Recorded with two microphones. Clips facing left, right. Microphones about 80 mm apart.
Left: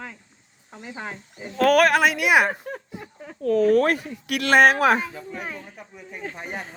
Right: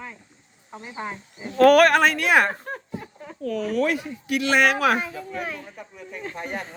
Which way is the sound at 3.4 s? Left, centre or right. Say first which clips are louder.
Left 6 dB; left.